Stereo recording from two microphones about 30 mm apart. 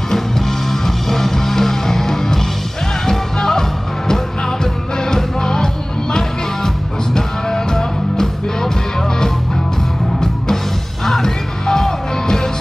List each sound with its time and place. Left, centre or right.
0.7 s music: centre
4.9 s music: left
7.2 s music: centre
11.1 s music: centre